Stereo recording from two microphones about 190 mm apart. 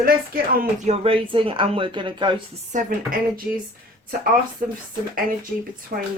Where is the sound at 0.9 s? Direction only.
30° right (ahead or behind).